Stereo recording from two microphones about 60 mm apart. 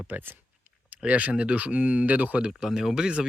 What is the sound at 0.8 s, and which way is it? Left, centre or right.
Speech, right.